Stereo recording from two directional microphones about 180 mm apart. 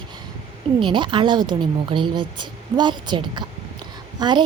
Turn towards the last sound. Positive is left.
turn(degrees=-25)  # may be behind; listen again after turning